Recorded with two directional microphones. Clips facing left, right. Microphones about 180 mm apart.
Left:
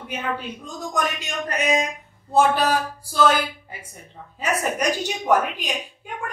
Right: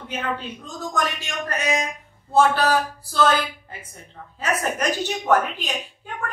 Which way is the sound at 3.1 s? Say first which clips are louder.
Left 1 dB; 10° left (ahead or behind).